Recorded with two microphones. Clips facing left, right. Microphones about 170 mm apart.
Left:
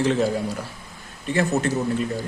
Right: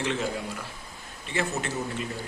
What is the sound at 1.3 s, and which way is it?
Speech, 45° left (ahead or behind).